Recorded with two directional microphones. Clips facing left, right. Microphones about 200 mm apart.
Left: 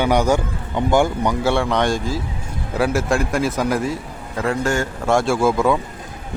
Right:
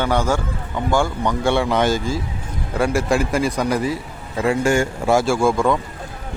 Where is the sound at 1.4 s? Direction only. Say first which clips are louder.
Right 2 dB; centre (ahead or behind).